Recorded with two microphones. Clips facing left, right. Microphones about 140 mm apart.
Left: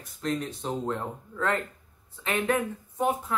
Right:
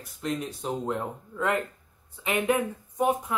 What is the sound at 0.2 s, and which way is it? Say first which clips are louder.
Speech: left 1 dB; 10° right (ahead or behind).